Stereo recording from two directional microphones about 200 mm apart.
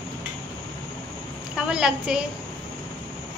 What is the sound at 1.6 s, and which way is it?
Speech, 5° right (ahead or behind).